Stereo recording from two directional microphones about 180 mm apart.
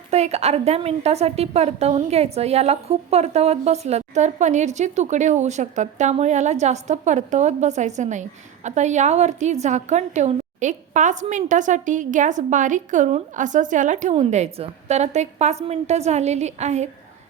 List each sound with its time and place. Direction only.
0.1 s a woman's voice: 35° right (ahead or behind)